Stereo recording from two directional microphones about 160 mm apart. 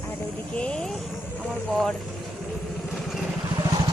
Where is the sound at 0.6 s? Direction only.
5° left (ahead or behind).